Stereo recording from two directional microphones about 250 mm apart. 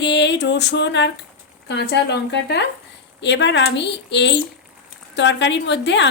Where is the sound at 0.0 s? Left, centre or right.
Left.